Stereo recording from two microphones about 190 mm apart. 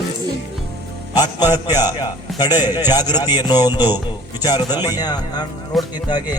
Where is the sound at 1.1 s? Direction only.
20° left (ahead or behind).